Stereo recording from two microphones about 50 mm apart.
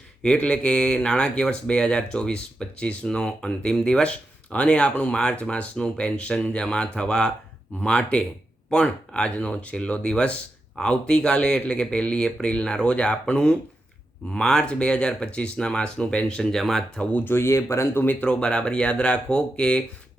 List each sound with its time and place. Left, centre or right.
0.3 s speech: left; by 16.8 s centre
17.0 s speech: left
17.2 s speech: left
17.5 s speech: left
18.0 s speech: left
18.3 s speech: centre